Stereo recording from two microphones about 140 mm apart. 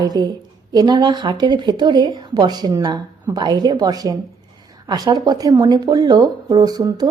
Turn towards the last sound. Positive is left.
turn(degrees=-30)  # may be behind; listen again after turning